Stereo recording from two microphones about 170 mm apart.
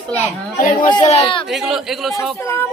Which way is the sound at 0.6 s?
55° left (ahead or behind).